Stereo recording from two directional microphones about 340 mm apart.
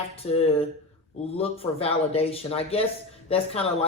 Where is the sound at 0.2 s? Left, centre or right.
Centre.